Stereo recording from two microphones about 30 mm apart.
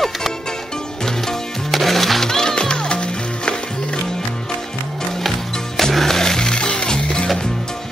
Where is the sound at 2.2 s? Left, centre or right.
Left.